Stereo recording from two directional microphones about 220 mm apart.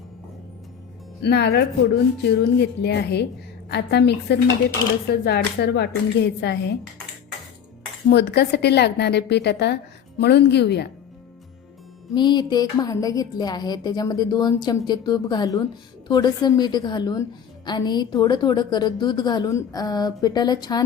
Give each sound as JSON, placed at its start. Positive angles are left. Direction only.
{"t": 1.2, "sound": "a woman's voice", "side_deg": 50}
{"t": 8.1, "sound": "a woman's voice", "side_deg": 50}
{"t": 12.1, "sound": "a woman's voice", "side_deg": 20}